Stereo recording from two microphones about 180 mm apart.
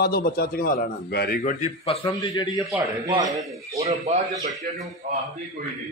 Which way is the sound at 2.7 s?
20° right (ahead or behind).